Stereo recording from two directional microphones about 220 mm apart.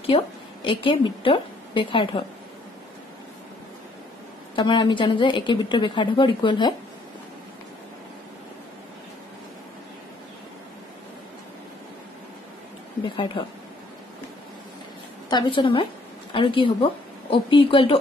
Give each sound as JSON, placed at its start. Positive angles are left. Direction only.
{"t": 0.0, "sound": "a woman's voice", "side_deg": 25}
{"t": 4.6, "sound": "a woman's voice", "side_deg": 20}
{"t": 13.1, "sound": "a woman's voice", "side_deg": 20}
{"t": 15.2, "sound": "a woman's voice", "side_deg": 20}